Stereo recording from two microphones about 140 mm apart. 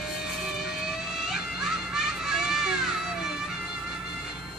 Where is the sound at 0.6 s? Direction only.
Centre (ahead or behind).